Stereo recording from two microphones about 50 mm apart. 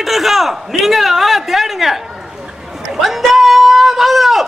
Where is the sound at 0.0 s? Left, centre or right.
Centre.